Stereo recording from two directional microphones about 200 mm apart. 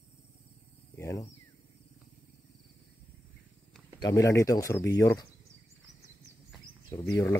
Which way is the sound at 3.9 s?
15° left (ahead or behind).